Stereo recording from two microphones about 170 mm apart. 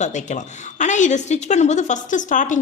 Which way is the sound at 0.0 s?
45° left (ahead or behind).